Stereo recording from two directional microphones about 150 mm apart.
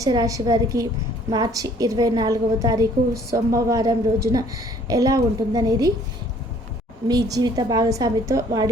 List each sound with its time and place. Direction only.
0.0 s a woman's voice: 25° right (ahead or behind)
7.1 s a woman's voice: 25° right (ahead or behind)